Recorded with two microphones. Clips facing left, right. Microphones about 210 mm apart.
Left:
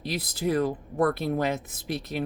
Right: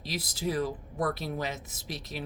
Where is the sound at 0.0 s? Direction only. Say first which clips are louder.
Left 4 dB; 55° left (ahead or behind).